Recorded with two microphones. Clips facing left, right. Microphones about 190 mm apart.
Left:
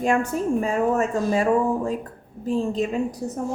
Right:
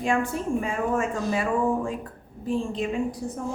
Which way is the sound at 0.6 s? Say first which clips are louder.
Left 5 dB; 40° left (ahead or behind).